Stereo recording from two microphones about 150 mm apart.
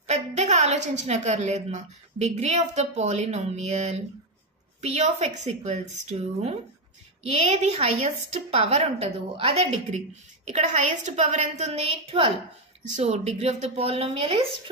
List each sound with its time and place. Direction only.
0.0 s a woman's voice: 50° right (ahead or behind)